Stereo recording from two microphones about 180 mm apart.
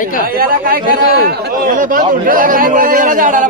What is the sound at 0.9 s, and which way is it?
Speech, 55° left (ahead or behind).